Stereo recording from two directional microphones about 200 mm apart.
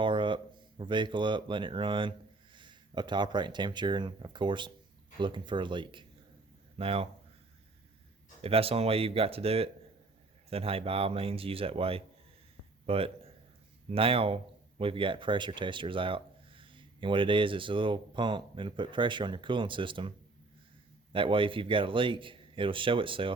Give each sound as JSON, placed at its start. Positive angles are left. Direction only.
{"t": 0.0, "sound": "speech", "side_deg": -25}
{"t": 8.4, "sound": "a man's voice", "side_deg": -30}